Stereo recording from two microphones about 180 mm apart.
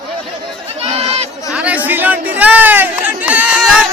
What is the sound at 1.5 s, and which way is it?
Chatter, 5° right (ahead or behind).